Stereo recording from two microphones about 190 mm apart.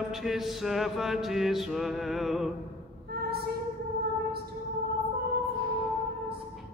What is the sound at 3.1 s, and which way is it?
Female singing, 55° right (ahead or behind).